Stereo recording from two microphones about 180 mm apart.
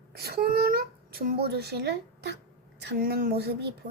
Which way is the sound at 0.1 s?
60° right (ahead or behind).